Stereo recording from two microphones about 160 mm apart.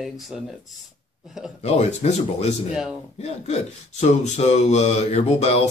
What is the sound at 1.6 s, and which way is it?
Speech, 45° left (ahead or behind).